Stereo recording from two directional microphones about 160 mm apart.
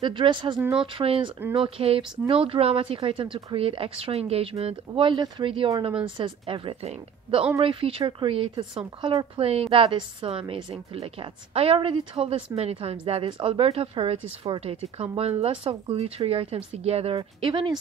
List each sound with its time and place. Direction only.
0.0 s a woman's voice: 30° right (ahead or behind)